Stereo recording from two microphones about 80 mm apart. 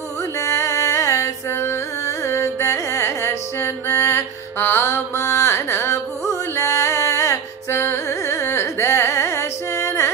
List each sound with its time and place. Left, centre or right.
0.4 s music: left
6.5 s carnatic music: left